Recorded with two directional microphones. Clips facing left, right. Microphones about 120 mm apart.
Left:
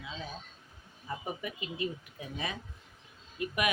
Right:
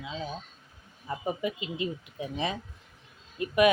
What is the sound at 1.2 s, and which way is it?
Speech, 20° right (ahead or behind).